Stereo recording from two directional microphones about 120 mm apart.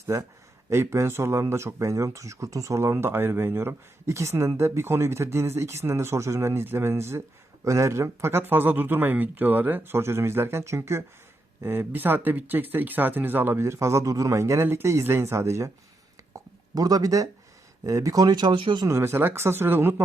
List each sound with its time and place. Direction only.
0.0 s speech: 25° right (ahead or behind)
16.7 s speech: 30° right (ahead or behind)
18.9 s speech: 20° right (ahead or behind)